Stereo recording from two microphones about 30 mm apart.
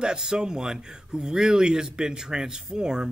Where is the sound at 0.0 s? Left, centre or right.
Right.